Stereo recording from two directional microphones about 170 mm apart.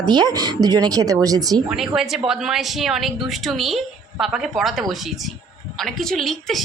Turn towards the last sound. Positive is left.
turn(degrees=0)  # may be behind; listen again after turning